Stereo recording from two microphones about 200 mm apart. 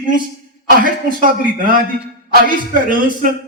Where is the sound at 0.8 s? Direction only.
45° right (ahead or behind).